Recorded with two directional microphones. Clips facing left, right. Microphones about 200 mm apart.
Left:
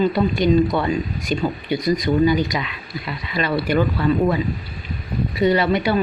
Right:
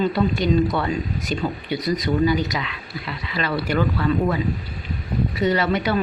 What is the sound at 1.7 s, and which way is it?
Speech, 15° left (ahead or behind).